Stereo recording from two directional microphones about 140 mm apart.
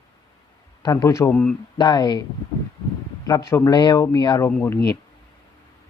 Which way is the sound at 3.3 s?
25° left (ahead or behind).